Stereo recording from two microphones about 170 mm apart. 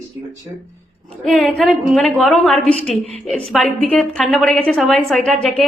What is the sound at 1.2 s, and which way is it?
A woman's voice, centre (ahead or behind).